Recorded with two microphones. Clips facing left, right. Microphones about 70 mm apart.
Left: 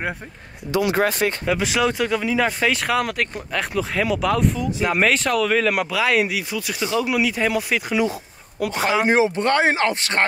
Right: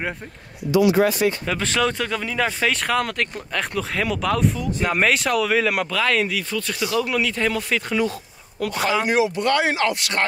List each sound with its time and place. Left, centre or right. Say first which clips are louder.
0.7 s speech: right 3 dB; left
1.4 s speech: left 2 dB; centre
9.0 s speech: left 4 dB; left